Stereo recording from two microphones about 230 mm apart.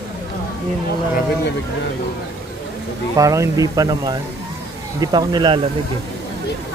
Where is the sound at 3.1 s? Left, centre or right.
Centre.